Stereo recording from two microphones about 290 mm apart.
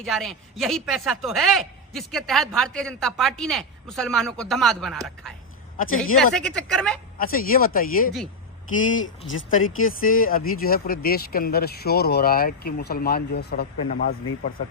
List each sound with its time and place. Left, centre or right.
0.0 s speech: centre
6.3 s speech: centre
7.2 s speech: left
8.8 s speech: left
10.0 s speech: left